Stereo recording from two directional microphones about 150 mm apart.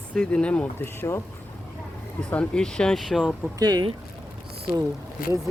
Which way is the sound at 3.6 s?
25° right (ahead or behind).